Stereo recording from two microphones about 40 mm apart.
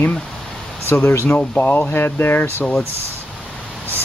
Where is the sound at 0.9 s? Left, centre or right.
Left.